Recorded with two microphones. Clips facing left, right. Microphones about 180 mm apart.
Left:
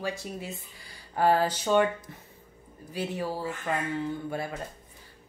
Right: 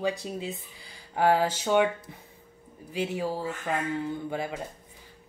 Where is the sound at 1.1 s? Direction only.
15° right (ahead or behind).